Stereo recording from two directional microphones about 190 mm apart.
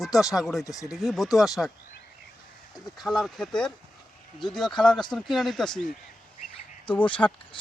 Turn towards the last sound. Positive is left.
turn(degrees=10)  # may be behind; listen again after turning